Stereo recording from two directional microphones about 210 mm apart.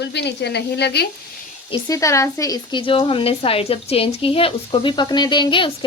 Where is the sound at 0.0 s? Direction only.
55° left (ahead or behind).